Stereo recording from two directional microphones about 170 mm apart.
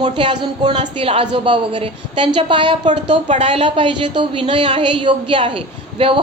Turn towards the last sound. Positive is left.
turn(degrees=-30)  # may be behind; listen again after turning